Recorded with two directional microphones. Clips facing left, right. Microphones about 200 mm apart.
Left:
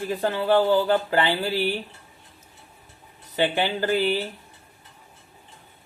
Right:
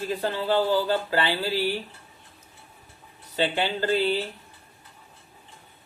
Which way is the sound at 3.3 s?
15° left (ahead or behind).